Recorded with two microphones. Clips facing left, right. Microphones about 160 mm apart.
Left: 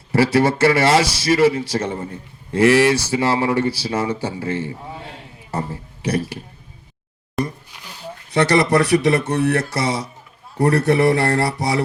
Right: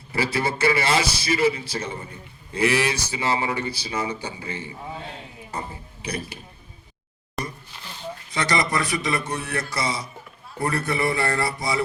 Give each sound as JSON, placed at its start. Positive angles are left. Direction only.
{"t": 0.1, "sound": "a man's voice", "side_deg": 75}
{"t": 7.4, "sound": "a sound", "side_deg": 0}
{"t": 8.3, "sound": "speech", "side_deg": 65}